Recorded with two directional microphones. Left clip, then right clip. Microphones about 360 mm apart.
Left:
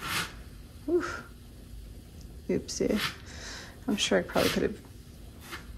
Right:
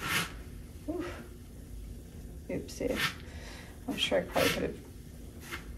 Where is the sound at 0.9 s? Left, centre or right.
Left.